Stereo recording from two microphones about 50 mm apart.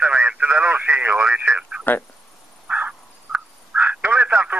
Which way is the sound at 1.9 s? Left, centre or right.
Left.